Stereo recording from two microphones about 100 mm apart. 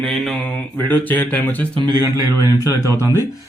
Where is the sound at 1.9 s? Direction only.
40° right (ahead or behind).